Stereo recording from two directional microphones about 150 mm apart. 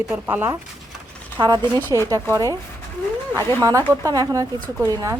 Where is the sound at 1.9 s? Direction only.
25° left (ahead or behind).